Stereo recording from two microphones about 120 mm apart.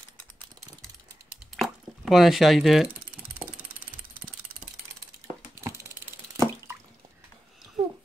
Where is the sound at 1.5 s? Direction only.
Centre (ahead or behind).